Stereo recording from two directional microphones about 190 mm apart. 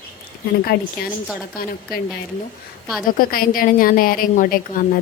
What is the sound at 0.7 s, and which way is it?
Speech, 60° left (ahead or behind).